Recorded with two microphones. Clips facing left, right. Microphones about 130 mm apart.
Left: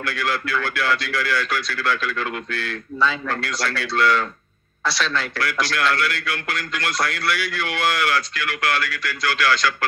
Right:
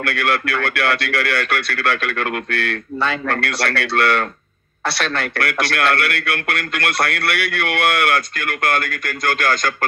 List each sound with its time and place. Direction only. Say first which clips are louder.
0.0 s a man's voice: right 5 dB; 65° right (ahead or behind)